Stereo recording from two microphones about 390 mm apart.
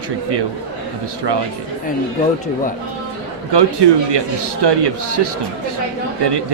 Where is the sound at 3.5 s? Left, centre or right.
Right.